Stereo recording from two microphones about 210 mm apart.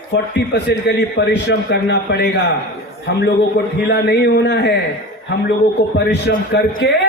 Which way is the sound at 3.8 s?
55° left (ahead or behind).